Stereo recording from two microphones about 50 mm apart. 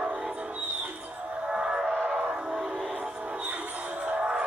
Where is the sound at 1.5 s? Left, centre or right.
Centre.